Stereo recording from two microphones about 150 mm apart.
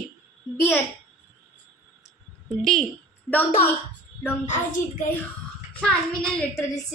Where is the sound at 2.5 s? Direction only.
Centre (ahead or behind).